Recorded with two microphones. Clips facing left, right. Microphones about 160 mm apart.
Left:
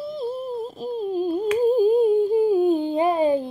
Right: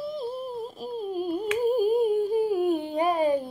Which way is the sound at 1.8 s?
25° left (ahead or behind).